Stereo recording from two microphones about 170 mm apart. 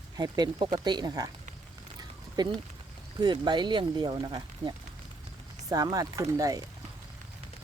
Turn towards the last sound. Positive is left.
turn(degrees=-20)  # may be behind; listen again after turning